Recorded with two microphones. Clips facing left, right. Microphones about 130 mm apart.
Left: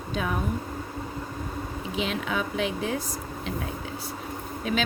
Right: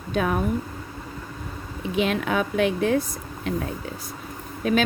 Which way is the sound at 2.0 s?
55° right (ahead or behind).